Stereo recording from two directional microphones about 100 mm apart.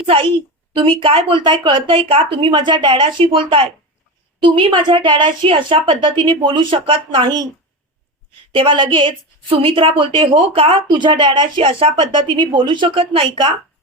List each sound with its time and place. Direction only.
0.0 s a woman's voice: 65° right (ahead or behind)
8.5 s a woman's voice: 55° right (ahead or behind)
12.3 s a woman's voice: 50° right (ahead or behind)